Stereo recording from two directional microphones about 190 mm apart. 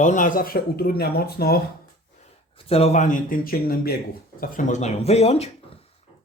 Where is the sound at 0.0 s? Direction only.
40° left (ahead or behind).